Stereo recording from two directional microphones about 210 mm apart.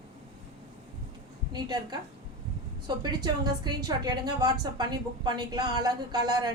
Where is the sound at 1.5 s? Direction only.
20° right (ahead or behind).